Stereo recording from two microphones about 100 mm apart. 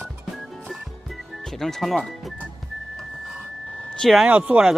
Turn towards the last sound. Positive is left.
turn(degrees=-10)  # may be behind; listen again after turning